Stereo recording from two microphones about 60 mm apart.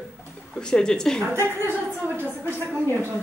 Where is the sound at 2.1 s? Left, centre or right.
Left.